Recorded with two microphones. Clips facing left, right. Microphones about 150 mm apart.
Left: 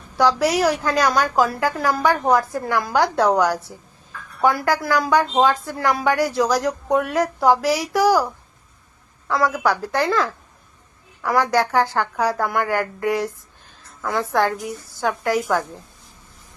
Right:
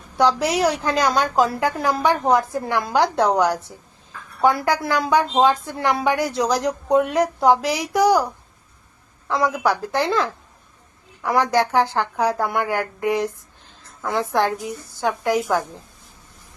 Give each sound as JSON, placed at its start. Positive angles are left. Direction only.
{"t": 0.2, "sound": "a woman's voice", "side_deg": -20}